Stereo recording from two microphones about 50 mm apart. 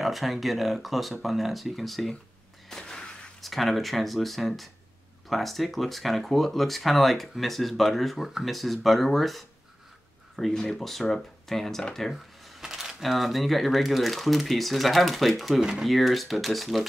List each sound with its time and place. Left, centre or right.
0.0 s speech: centre
2.7 s a sound: centre
3.4 s speech: centre
12.1 s speech: centre